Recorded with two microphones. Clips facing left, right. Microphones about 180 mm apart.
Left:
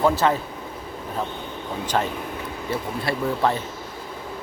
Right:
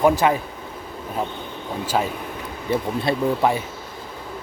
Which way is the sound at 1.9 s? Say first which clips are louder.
Right 1 dB; 10° right (ahead or behind).